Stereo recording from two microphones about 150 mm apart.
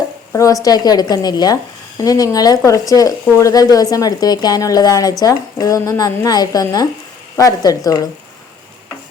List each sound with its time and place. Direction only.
0.3 s speech: 20° left (ahead or behind)